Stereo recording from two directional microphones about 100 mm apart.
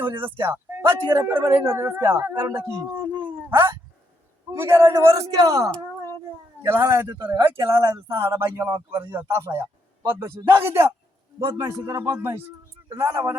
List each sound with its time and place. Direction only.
0.0 s a man's voice: 20° right (ahead or behind); by 5.7 s 40° right (ahead or behind)
6.7 s speech: 25° right (ahead or behind)
7.8 s speech: 45° right (ahead or behind)
8.2 s speech: 25° right (ahead or behind)